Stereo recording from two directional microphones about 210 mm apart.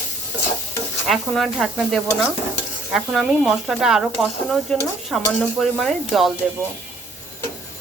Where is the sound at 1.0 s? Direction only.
Centre (ahead or behind).